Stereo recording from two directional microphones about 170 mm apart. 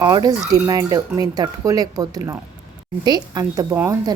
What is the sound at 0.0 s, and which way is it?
A woman's voice, 25° right (ahead or behind).